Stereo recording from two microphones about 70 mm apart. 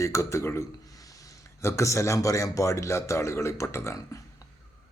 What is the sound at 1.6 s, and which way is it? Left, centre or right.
A man's voice, left.